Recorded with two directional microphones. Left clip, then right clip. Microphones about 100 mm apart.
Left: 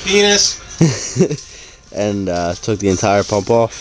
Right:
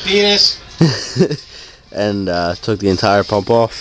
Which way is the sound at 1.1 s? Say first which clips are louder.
Right 1 dB; centre (ahead or behind).